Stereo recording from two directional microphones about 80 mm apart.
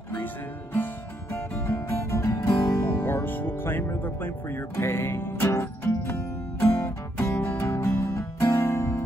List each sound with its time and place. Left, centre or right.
1.3 s guitar: left